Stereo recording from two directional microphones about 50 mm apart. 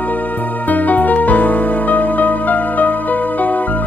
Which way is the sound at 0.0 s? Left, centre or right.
Left.